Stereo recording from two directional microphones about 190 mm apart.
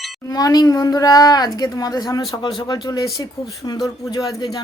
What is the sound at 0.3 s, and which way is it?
A woman's voice, 20° left (ahead or behind).